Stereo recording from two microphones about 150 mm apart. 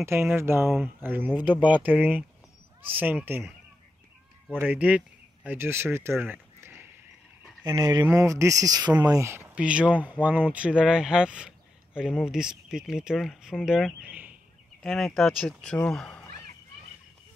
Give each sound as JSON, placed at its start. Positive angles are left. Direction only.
{"t": 0.0, "sound": "speech", "side_deg": -15}
{"t": 1.3, "sound": "speech", "side_deg": 30}
{"t": 1.9, "sound": "speech", "side_deg": -10}
{"t": 4.6, "sound": "speech", "side_deg": -10}
{"t": 6.2, "sound": "a sound", "side_deg": -15}
{"t": 7.6, "sound": "speech", "side_deg": -25}